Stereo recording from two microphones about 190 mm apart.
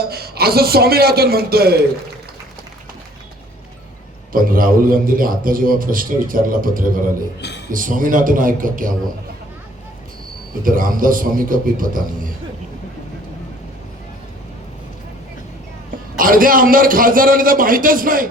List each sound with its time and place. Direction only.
0.1 s a man's voice: 55° right (ahead or behind)
4.3 s a man's voice: 50° right (ahead or behind)
10.6 s a man's voice: 45° right (ahead or behind)
16.1 s a man's voice: 45° right (ahead or behind)